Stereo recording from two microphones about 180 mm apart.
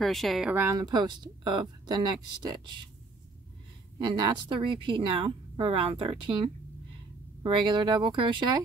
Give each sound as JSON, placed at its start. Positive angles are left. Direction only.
{"t": 0.0, "sound": "speech", "side_deg": 0}
{"t": 4.0, "sound": "speech", "side_deg": -25}